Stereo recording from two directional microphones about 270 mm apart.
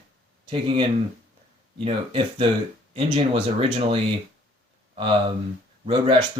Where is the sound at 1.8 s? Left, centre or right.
Centre.